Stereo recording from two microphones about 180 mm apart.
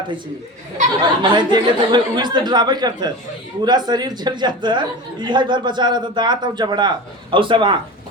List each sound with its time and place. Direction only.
1.2 s a woman's voice: 25° right (ahead or behind)